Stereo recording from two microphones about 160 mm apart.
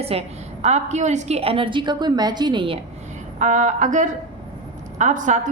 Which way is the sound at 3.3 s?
50° right (ahead or behind).